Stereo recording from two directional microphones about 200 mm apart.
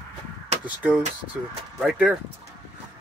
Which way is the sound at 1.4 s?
5° right (ahead or behind).